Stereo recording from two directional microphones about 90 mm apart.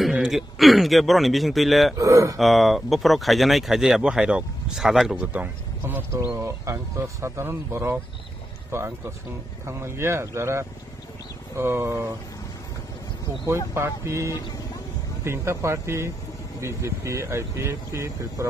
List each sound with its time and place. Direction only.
0.1 s speech: 5° right (ahead or behind)
2.0 s speech: 40° right (ahead or behind)
2.3 s speech: centre (ahead or behind); by 6.0 s 20° right (ahead or behind)
6.2 s speech: 30° right (ahead or behind)
13.7 s speech: 30° right (ahead or behind)